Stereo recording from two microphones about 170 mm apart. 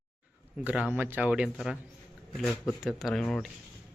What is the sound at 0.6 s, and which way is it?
Speech, 5° right (ahead or behind).